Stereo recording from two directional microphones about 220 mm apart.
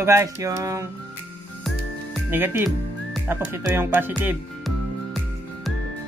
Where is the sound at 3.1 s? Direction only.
10° right (ahead or behind).